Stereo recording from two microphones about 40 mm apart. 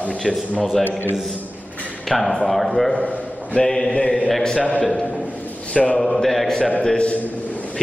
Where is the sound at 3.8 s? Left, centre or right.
Left.